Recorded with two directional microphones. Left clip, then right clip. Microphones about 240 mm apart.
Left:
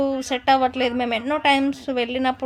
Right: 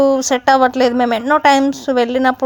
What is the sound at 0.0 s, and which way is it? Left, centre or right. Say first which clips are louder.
A woman's voice: right 9 dB; right.